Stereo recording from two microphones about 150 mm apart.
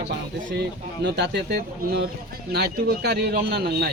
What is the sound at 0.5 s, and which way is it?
Speech, 90° right.